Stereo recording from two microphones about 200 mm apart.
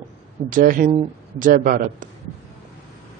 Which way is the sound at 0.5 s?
45° right (ahead or behind).